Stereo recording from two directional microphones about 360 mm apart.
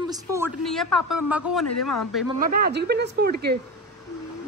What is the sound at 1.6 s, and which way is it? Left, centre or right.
Speech, left.